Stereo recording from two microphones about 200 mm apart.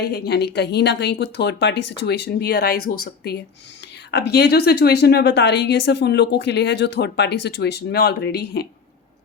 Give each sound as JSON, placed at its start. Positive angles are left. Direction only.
{"t": 0.0, "sound": "speech", "side_deg": 55}
{"t": 4.1, "sound": "speech", "side_deg": 55}